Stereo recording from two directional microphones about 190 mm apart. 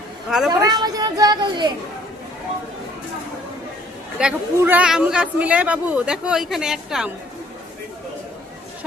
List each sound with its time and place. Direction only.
0.3 s a man's voice: centre (ahead or behind)
0.6 s speech: 20° right (ahead or behind)
4.2 s a man's voice: 5° right (ahead or behind)